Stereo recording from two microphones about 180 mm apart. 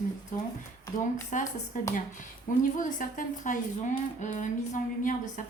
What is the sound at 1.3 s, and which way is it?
Speech, 45° left (ahead or behind).